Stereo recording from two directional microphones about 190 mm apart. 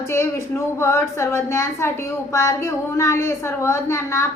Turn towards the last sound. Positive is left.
turn(degrees=15)  # may be behind; listen again after turning